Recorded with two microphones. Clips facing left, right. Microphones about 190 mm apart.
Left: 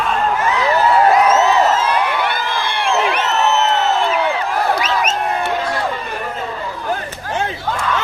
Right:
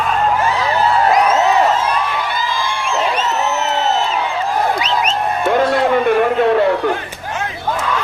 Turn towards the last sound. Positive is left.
turn(degrees=-70)  # may be behind; listen again after turning